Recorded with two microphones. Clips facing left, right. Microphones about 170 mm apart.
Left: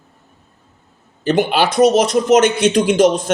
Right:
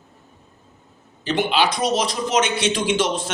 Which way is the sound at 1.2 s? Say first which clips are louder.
Left 5 dB; 50° left (ahead or behind).